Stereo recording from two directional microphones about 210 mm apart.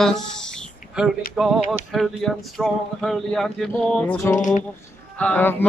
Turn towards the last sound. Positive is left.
turn(degrees=5)  # may be behind; listen again after turning